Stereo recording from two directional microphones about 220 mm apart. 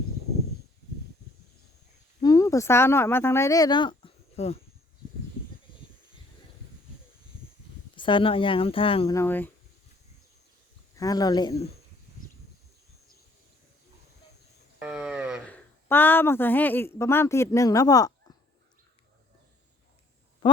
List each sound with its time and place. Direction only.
2.2 s speech: 15° left (ahead or behind)
7.9 s speech: 20° left (ahead or behind)
9.1 s a woman's voice: 10° left (ahead or behind)
10.9 s a woman's voice: 15° left (ahead or behind)
14.8 s a sound: 5° right (ahead or behind)
15.4 s a woman's voice: 10° left (ahead or behind)